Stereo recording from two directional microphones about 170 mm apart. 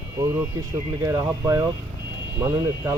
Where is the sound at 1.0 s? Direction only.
20° right (ahead or behind).